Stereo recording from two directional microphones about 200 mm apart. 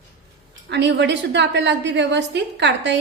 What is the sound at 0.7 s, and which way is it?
A woman's voice, 60° right (ahead or behind).